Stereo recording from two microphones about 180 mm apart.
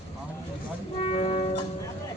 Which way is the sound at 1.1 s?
35° left (ahead or behind).